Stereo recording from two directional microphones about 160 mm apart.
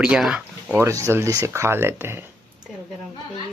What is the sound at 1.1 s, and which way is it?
Speech, 20° right (ahead or behind).